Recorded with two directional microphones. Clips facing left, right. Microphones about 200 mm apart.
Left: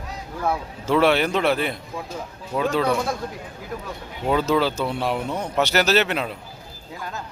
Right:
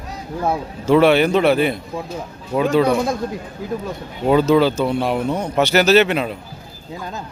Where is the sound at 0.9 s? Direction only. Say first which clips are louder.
Right 6 dB; centre (ahead or behind).